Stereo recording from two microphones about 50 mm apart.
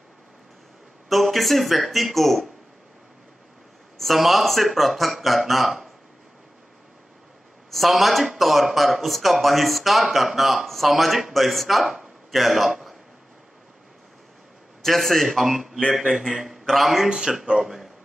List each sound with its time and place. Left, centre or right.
1.0 s speech: centre
4.0 s speech: centre
7.7 s speech: centre
14.8 s a man's voice: centre
17.1 s speech: centre